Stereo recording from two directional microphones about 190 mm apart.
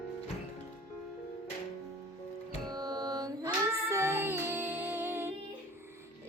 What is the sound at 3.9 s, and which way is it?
Music, 10° right (ahead or behind).